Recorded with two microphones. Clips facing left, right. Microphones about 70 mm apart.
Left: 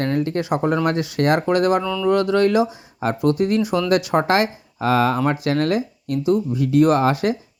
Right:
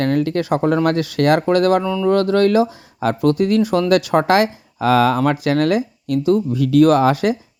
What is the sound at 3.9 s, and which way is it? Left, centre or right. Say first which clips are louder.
Speech: right 3 dB; right.